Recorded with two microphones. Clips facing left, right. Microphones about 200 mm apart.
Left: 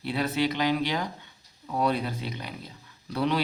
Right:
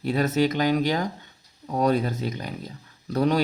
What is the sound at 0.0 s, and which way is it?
Speech, 45° right (ahead or behind).